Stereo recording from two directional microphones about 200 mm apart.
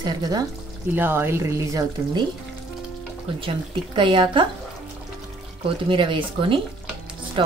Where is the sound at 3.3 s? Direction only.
25° right (ahead or behind).